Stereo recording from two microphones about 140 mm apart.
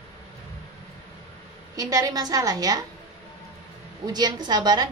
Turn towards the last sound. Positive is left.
turn(degrees=-30)  # may be behind; listen again after turning